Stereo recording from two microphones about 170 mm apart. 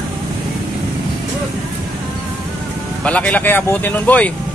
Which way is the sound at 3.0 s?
5° left (ahead or behind).